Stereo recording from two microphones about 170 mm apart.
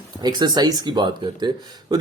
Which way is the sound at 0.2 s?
25° right (ahead or behind).